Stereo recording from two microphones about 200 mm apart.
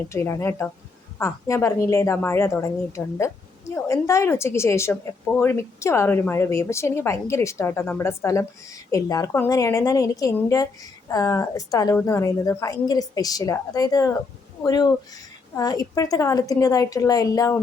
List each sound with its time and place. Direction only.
0.1 s a woman's voice: 15° left (ahead or behind)